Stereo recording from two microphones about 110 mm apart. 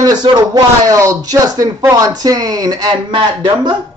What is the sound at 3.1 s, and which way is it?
Speech, 45° right (ahead or behind).